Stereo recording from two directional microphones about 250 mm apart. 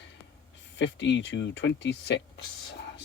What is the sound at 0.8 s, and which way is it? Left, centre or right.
Speech, left.